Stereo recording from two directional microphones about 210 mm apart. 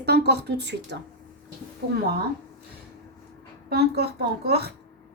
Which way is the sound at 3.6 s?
50° right (ahead or behind).